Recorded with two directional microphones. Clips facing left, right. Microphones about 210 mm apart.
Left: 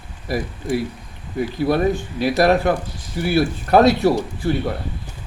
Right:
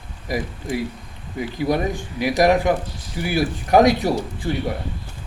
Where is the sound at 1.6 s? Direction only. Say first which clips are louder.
Left 3 dB; 15° right (ahead or behind).